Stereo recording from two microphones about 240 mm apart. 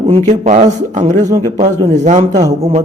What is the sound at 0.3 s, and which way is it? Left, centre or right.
A man's voice, right.